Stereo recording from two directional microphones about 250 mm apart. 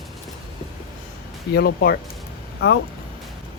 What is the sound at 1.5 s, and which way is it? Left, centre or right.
Speech, left.